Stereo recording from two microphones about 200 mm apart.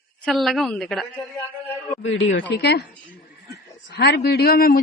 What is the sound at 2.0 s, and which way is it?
Speech, 70° left (ahead or behind).